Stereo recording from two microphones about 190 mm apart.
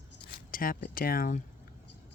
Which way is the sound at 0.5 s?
50° left (ahead or behind).